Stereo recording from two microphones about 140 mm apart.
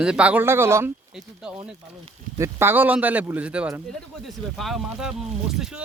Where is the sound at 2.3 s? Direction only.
20° right (ahead or behind).